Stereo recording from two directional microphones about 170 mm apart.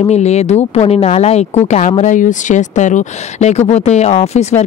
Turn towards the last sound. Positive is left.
turn(degrees=40)  # may be behind; listen again after turning